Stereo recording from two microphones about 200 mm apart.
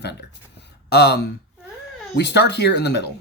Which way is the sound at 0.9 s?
55° left (ahead or behind).